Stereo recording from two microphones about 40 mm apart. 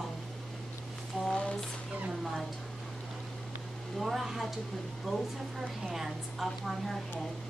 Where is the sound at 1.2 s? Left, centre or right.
Centre.